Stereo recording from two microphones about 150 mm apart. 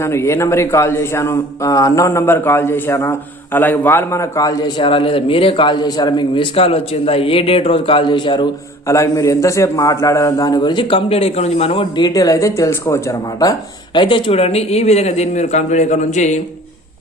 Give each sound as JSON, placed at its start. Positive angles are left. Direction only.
{"t": 0.0, "sound": "a man's voice", "side_deg": 15}
{"t": 8.9, "sound": "a man's voice", "side_deg": 20}